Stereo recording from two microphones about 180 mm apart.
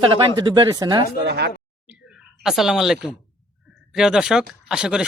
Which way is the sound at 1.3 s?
65° right (ahead or behind).